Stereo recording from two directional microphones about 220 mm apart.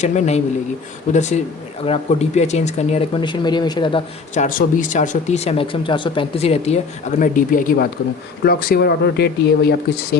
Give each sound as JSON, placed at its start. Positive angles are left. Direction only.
{"t": 0.0, "sound": "speech", "side_deg": 30}
{"t": 4.4, "sound": "speech", "side_deg": 35}